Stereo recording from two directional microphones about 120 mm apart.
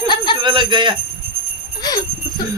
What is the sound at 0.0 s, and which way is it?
Jingle bell, 40° left (ahead or behind).